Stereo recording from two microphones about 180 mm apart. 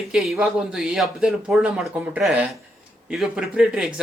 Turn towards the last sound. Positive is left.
turn(degrees=0)  # may be behind; listen again after turning